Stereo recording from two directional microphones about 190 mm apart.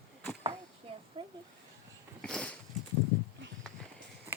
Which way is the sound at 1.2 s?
25° right (ahead or behind).